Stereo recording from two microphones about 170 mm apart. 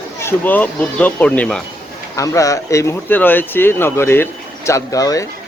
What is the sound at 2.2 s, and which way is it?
Speech, 20° left (ahead or behind).